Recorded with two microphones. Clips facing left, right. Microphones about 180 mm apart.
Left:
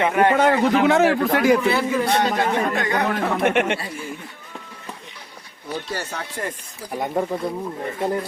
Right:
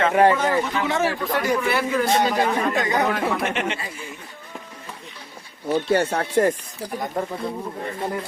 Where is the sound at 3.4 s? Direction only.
55° left (ahead or behind).